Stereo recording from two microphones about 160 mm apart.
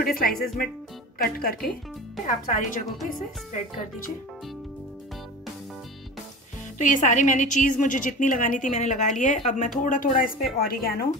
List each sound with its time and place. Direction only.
0.0 s speech: 65° left (ahead or behind)
2.2 s a woman's voice: 55° left (ahead or behind)
6.8 s a woman's voice: 55° left (ahead or behind); by 11.1 s 70° left (ahead or behind)